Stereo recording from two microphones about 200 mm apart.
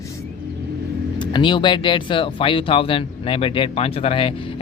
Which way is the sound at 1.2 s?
25° left (ahead or behind).